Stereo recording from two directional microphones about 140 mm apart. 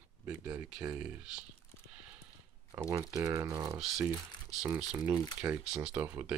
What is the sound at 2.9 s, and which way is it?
Speech, 25° right (ahead or behind).